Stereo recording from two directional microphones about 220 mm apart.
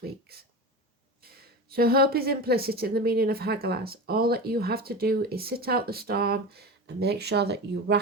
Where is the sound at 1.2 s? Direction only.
45° right (ahead or behind).